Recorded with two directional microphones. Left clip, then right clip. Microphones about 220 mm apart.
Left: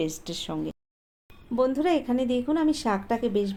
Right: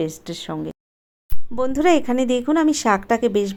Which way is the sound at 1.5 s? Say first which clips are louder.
Right 6 dB; 40° right (ahead or behind).